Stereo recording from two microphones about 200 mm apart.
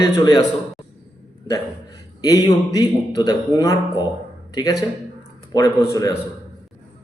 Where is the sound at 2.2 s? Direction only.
20° left (ahead or behind).